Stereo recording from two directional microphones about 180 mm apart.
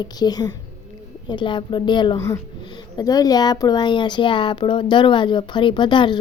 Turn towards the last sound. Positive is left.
turn(degrees=25)  # may be behind; listen again after turning